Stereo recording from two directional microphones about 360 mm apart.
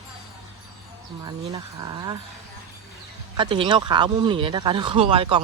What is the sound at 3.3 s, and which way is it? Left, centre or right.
Speech, centre.